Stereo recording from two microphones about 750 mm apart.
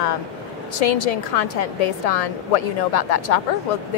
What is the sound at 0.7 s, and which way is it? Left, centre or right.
A woman's voice, left.